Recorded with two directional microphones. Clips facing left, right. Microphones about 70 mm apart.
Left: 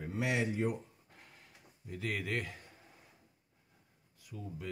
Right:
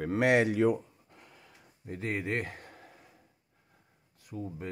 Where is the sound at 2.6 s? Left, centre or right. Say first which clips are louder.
Right 7 dB; right.